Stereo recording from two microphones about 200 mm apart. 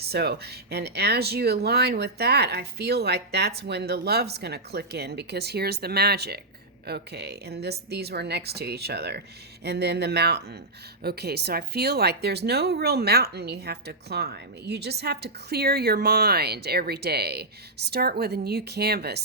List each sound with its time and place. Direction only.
0.0 s speech: 50° right (ahead or behind)